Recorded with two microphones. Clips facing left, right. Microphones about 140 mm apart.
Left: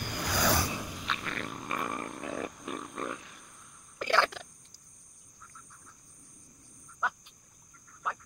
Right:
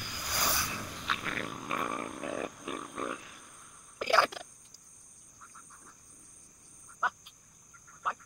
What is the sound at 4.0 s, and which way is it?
Cricket, 10° right (ahead or behind).